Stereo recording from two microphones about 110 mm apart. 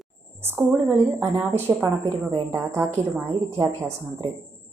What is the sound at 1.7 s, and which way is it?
Speech, 30° right (ahead or behind).